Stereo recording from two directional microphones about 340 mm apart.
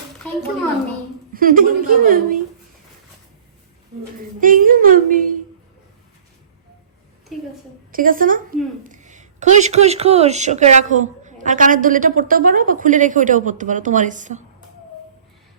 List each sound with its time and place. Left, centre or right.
1.3 s speech: right
4.4 s speech: right
7.9 s speech: right